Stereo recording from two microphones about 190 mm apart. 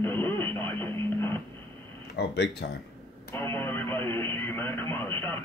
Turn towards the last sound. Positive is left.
turn(degrees=10)  # may be behind; listen again after turning